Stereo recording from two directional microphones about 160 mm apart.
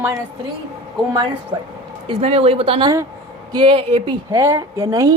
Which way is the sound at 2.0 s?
40° right (ahead or behind).